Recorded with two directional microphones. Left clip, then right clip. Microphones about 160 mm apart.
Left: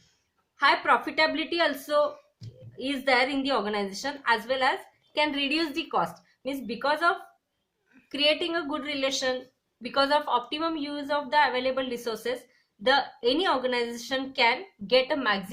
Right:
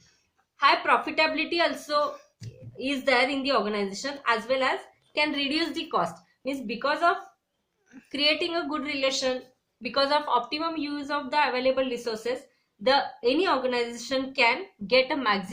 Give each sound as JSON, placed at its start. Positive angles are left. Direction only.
{"t": 0.5, "sound": "a woman's voice", "side_deg": 35}